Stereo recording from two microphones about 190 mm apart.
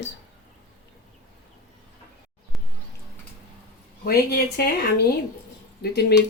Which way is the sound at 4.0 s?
55° left (ahead or behind).